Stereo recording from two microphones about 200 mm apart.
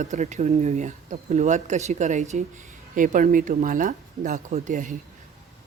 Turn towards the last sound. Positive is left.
turn(degrees=-40)  # may be behind; listen again after turning